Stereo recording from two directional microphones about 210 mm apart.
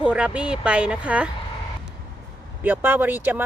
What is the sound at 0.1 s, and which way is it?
Speech, 5° right (ahead or behind).